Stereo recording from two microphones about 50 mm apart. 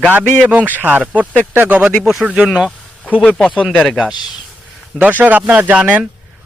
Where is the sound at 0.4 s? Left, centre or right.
Right.